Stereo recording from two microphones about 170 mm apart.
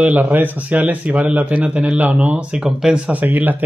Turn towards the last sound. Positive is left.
turn(degrees=-10)  # may be behind; listen again after turning